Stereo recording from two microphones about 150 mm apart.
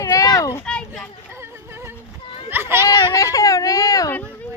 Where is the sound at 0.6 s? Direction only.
5° left (ahead or behind).